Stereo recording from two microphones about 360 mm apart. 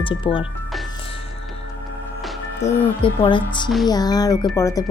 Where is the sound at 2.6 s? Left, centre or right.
Centre.